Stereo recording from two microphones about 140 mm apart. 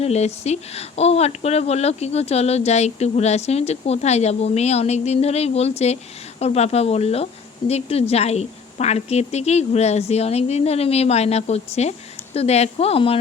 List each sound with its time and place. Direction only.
0.0 s speech: 50° left (ahead or behind)